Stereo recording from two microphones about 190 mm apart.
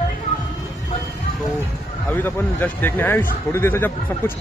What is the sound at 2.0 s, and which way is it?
A man's voice, 10° left (ahead or behind).